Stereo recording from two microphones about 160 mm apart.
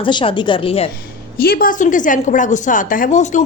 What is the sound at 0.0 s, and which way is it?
Speech, 30° left (ahead or behind).